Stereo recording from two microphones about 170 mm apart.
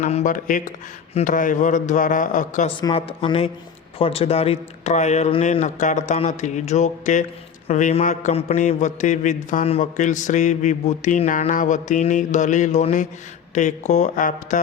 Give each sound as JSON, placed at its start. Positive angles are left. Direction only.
{"t": 0.0, "sound": "mantra", "side_deg": 45}
{"t": 2.6, "sound": "a woman's voice", "side_deg": 35}
{"t": 3.9, "sound": "mantra", "side_deg": 35}